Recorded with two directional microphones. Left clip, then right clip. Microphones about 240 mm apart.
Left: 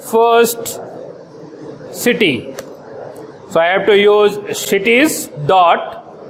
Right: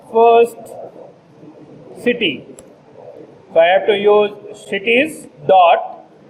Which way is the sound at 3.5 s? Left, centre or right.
Left.